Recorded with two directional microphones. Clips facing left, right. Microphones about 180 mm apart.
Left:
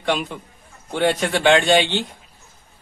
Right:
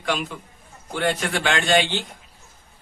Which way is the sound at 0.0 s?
35° left (ahead or behind).